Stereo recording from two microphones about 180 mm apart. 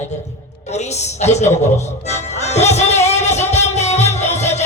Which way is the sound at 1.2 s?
40° left (ahead or behind).